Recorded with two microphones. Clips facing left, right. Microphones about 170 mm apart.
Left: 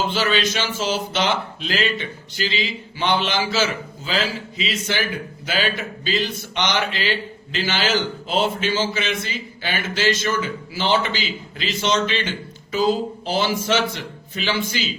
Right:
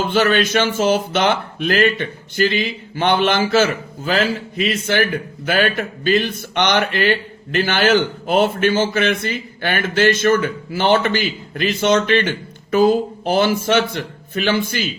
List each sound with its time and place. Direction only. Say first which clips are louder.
0.0 s a man's voice: right 5 dB; 55° right (ahead or behind)